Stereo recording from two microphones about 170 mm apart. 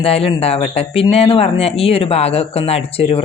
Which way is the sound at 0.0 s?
35° left (ahead or behind).